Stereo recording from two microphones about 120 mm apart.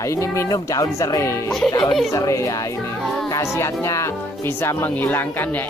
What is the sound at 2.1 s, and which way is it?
Speech, 25° left (ahead or behind).